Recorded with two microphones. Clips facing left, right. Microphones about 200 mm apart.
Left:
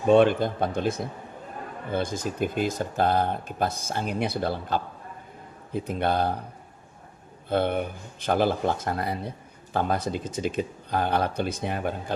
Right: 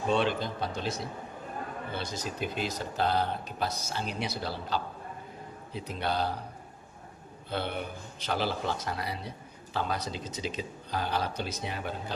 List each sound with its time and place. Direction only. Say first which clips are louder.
0.1 s speech: left 10 dB; 55° left (ahead or behind)
7.5 s speech: left 9 dB; 50° left (ahead or behind)